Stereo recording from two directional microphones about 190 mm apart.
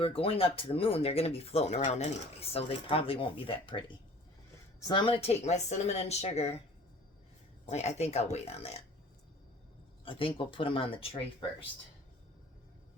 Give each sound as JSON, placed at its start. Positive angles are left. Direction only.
{"t": 0.0, "sound": "speech", "side_deg": 30}
{"t": 7.7, "sound": "speech", "side_deg": 35}
{"t": 10.0, "sound": "speech", "side_deg": 30}